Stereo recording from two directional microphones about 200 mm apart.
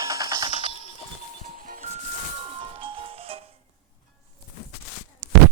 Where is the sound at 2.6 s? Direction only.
25° right (ahead or behind).